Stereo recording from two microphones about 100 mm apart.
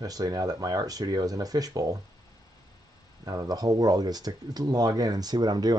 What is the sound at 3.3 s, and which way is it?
Speech, 40° right (ahead or behind).